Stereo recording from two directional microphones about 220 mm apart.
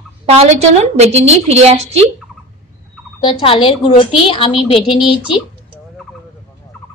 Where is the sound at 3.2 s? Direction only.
20° left (ahead or behind).